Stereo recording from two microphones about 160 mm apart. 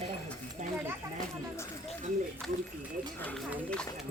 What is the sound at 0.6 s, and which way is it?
Speech, 50° right (ahead or behind).